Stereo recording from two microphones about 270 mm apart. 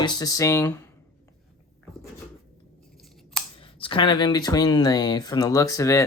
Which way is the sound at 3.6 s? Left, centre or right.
Centre.